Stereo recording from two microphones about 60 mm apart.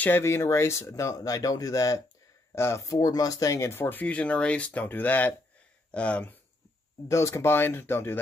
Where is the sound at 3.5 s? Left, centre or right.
Left.